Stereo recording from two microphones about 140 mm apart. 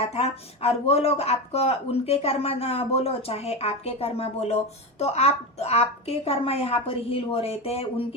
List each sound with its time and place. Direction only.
0.1 s speech: 45° left (ahead or behind)